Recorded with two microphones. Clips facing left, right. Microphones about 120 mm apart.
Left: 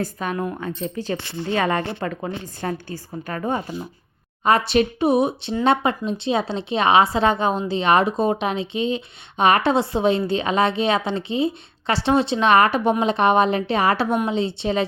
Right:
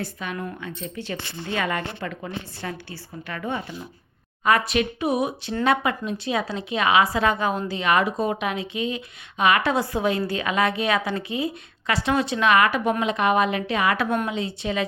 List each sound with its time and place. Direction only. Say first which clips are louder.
0.0 s a woman's voice: left 6 dB; 40° left (ahead or behind)